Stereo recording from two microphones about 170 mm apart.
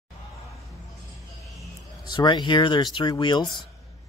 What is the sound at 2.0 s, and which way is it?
Speech, 25° left (ahead or behind).